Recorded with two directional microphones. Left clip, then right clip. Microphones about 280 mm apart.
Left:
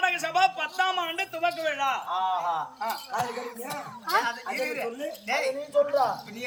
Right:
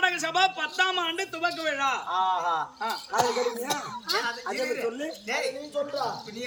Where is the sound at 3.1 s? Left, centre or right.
Right.